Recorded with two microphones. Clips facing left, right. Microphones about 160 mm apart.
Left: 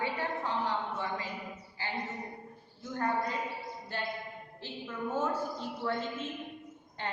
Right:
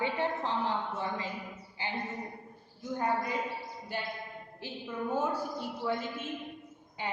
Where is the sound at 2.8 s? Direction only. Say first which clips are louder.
Right 1 dB; 15° right (ahead or behind).